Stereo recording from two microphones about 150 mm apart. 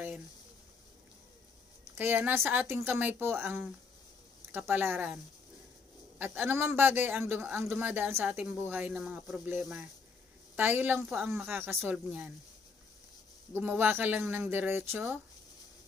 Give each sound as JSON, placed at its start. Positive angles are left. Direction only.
{"t": 2.0, "sound": "speech", "side_deg": -15}
{"t": 9.0, "sound": "a woman's voice", "side_deg": 0}
{"t": 13.5, "sound": "speech", "side_deg": -10}